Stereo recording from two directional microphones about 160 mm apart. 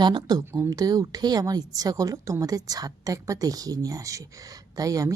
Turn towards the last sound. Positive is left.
turn(degrees=-20)  # may be behind; listen again after turning